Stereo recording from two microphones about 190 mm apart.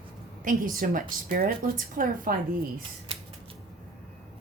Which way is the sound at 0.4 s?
45° right (ahead or behind).